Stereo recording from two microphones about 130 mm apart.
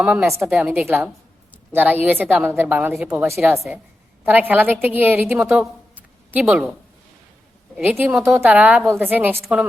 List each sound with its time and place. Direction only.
0.0 s a woman's voice: 10° right (ahead or behind)
5.4 s a woman's voice: 5° right (ahead or behind)
7.8 s a woman's voice: 15° right (ahead or behind)